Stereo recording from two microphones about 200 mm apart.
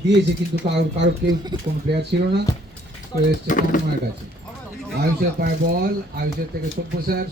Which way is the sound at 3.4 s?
40° left (ahead or behind).